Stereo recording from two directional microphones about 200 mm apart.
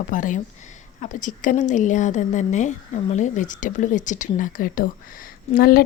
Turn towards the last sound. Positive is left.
turn(degrees=45)  # may be behind; listen again after turning